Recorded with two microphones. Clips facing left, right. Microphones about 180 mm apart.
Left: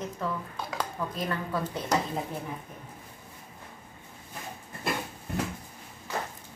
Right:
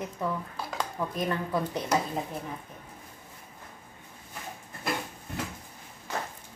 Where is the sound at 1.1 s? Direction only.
15° right (ahead or behind).